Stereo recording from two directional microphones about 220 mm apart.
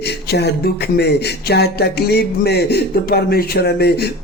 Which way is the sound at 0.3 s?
50° left (ahead or behind).